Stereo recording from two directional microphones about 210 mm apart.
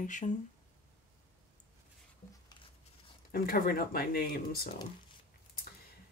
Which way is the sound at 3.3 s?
45° left (ahead or behind).